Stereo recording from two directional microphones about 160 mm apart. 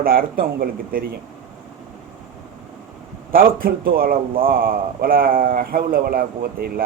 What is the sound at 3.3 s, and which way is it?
A man's voice, 65° right (ahead or behind).